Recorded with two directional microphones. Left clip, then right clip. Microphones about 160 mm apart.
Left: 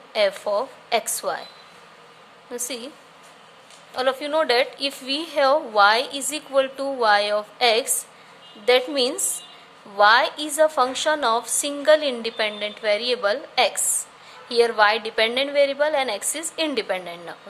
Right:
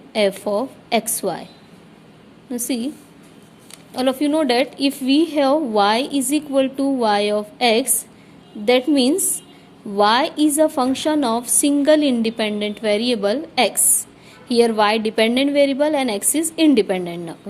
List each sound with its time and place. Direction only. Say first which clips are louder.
0.1 s a woman's voice: right 2 dB; 30° right (ahead or behind)
2.5 s a woman's voice: right 6 dB; 25° right (ahead or behind)
3.9 s a woman's voice: right 3 dB; 30° right (ahead or behind)